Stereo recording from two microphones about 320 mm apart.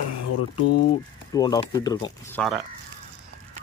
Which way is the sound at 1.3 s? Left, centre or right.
Centre.